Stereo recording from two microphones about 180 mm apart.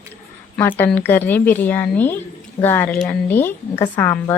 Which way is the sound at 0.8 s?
10° left (ahead or behind).